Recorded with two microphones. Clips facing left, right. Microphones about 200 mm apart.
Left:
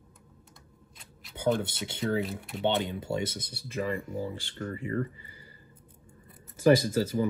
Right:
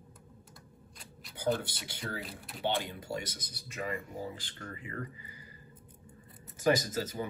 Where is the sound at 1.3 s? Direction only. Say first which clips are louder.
Left 4 dB; 25° left (ahead or behind).